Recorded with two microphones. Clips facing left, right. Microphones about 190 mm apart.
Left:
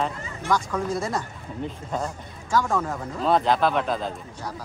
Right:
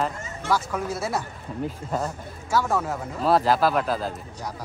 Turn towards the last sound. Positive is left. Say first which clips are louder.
# even
turn(degrees=-5)  # may be behind; listen again after turning